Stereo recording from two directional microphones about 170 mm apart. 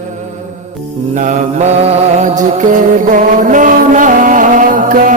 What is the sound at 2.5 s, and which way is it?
Music, 45° right (ahead or behind).